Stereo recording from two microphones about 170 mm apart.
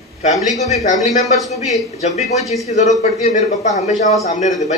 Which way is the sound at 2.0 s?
40° left (ahead or behind).